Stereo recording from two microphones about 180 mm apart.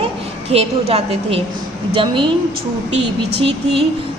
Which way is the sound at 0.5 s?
35° right (ahead or behind).